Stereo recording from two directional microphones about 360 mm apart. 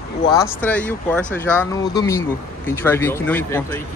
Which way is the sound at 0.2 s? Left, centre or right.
Centre.